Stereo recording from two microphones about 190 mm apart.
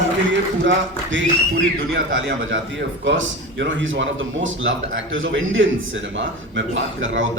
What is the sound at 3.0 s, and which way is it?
A man's voice, 75° right (ahead or behind).